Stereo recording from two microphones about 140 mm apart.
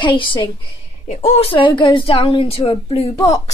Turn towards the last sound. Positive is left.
turn(degrees=45)  # may be behind; listen again after turning